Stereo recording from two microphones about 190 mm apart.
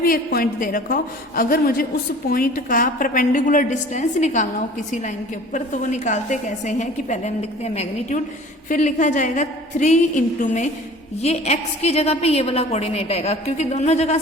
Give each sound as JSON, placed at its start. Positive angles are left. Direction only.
{"t": 0.0, "sound": "a woman's voice", "side_deg": 50}